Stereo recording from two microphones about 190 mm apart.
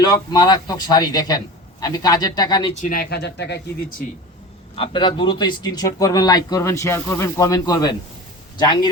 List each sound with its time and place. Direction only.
0.0 s a man's voice: 20° left (ahead or behind)
2.8 s speech: 50° left (ahead or behind)
4.7 s a man's voice: 30° left (ahead or behind)